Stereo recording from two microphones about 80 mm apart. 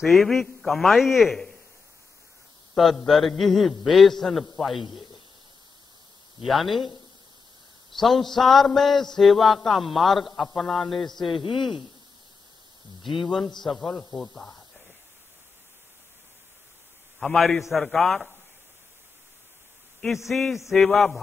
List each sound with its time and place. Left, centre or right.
0.0 s a man's voice: centre
2.7 s a man's voice: centre
6.4 s a man's voice: centre
8.0 s a man's voice: centre
11.2 s speech: left
13.0 s speech: left
13.6 s a man's voice: centre
17.2 s a man's voice: centre
20.2 s a man's voice: centre